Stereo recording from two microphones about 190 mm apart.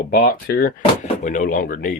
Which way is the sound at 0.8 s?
40° left (ahead or behind).